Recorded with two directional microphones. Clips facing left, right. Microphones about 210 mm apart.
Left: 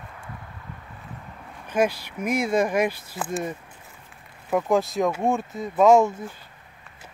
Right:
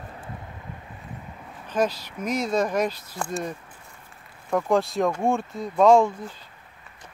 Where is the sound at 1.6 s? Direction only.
10° left (ahead or behind).